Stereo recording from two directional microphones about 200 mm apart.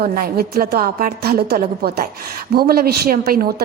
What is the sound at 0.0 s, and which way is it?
A woman's voice, 50° right (ahead or behind).